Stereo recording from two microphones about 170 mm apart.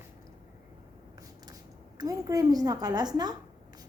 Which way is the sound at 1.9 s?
20° right (ahead or behind).